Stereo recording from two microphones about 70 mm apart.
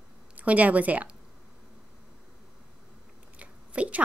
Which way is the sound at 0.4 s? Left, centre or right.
Right.